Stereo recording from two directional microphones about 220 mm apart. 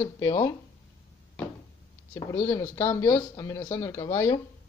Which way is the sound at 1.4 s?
5° left (ahead or behind).